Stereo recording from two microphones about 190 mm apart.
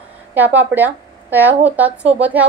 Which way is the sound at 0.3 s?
10° right (ahead or behind).